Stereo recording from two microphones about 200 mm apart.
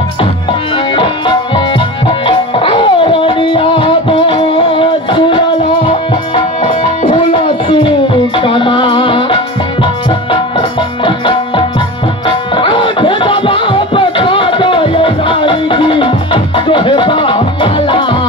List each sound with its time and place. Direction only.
0.2 s music: 25° left (ahead or behind)
6.7 s music: 35° left (ahead or behind)
7.3 s a sound: 25° left (ahead or behind)
8.4 s music: 25° left (ahead or behind)
11.1 s music: 25° left (ahead or behind)